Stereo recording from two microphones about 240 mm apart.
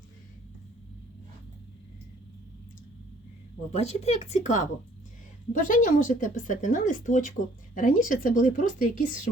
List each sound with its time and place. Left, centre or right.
3.7 s speech: left